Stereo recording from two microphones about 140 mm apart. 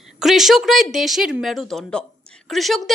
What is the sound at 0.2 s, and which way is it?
A woman's voice, centre (ahead or behind).